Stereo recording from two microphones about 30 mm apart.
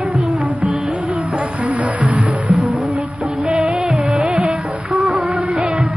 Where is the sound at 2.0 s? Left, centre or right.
Right.